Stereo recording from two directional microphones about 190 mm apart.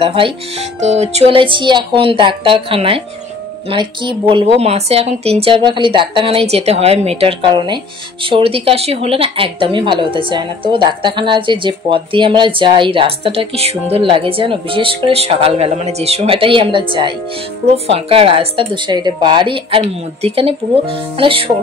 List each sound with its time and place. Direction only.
0.0 s speech: 30° right (ahead or behind)